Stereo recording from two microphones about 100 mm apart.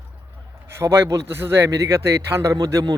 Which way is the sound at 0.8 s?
25° right (ahead or behind).